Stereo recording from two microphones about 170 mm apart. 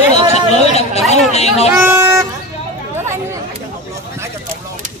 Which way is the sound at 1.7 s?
10° right (ahead or behind).